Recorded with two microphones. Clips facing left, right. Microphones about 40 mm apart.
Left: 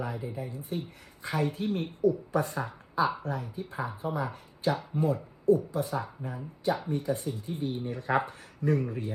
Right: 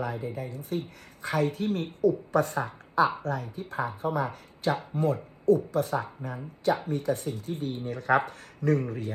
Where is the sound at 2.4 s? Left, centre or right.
Right.